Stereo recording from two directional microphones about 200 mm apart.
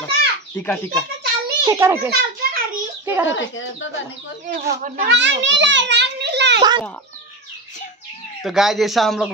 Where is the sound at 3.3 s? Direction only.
70° left (ahead or behind).